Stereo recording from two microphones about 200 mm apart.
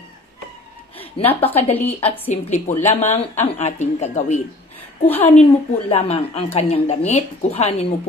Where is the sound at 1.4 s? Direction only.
30° left (ahead or behind).